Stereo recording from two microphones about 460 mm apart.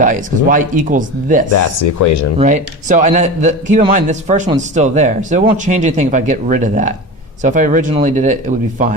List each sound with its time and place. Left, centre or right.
0.0 s a man's voice: centre
1.5 s speech: left
2.4 s a man's voice: centre